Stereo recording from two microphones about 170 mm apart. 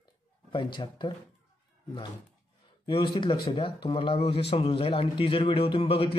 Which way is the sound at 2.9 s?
30° left (ahead or behind).